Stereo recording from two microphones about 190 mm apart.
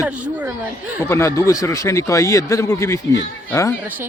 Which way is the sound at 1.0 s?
15° left (ahead or behind).